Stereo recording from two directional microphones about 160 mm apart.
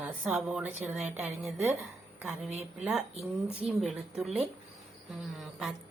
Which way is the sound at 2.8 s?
Centre (ahead or behind).